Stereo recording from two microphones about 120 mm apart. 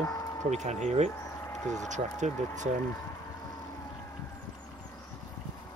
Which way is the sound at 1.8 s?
85° right.